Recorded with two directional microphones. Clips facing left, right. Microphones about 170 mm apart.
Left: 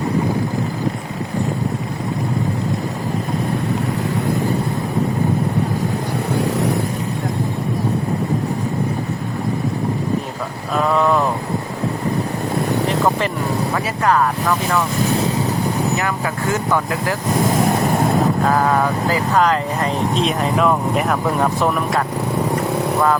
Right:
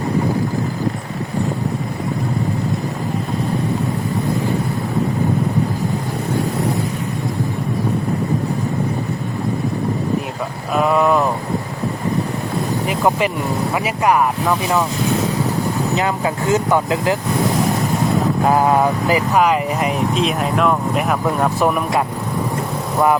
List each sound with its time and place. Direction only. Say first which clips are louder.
10.8 s vehicle: right 1 dB; 5° right (ahead or behind)
12.9 s vehicle: right 5 dB; 10° right (ahead or behind)
13.7 s speech: right 2 dB; 15° right (ahead or behind)
16.0 s speech: right 3 dB; 20° right (ahead or behind)
18.4 s speech: right 2 dB; 15° right (ahead or behind)